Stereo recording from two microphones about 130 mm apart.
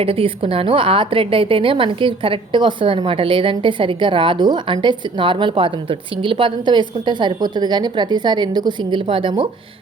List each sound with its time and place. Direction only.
0.0 s a woman's voice: 45° right (ahead or behind)